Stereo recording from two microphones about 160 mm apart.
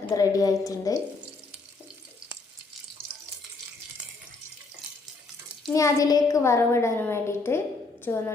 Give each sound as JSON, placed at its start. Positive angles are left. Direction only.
{"t": 0.1, "sound": "a woman's voice", "side_deg": 20}
{"t": 5.7, "sound": "a woman's voice", "side_deg": 20}